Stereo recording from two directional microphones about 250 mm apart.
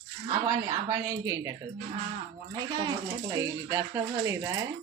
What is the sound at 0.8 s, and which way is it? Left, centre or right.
Speech, centre.